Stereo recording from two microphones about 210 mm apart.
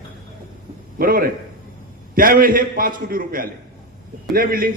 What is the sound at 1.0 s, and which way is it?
A man's voice, 45° right (ahead or behind).